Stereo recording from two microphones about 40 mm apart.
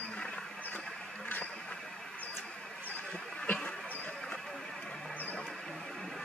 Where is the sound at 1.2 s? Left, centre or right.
Left.